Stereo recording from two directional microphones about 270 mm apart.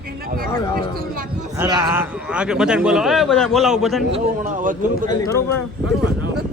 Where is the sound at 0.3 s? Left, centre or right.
Right.